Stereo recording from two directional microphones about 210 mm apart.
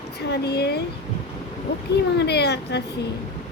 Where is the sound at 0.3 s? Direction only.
50° left (ahead or behind).